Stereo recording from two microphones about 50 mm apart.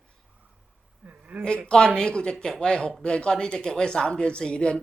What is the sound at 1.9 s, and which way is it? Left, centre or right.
Speech, centre.